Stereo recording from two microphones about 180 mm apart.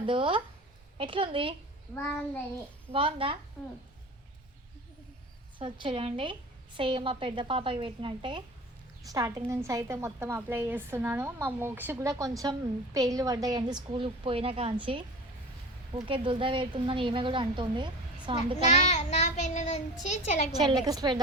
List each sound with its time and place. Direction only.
0.0 s a woman's voice: 30° right (ahead or behind)
2.9 s a woman's voice: 30° right (ahead or behind)
5.5 s a woman's voice: 25° right (ahead or behind)
18.9 s a child's voice: 40° left (ahead or behind)
20.6 s a woman's voice: 20° right (ahead or behind)